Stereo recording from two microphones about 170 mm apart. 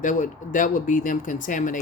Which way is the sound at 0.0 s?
50° left (ahead or behind).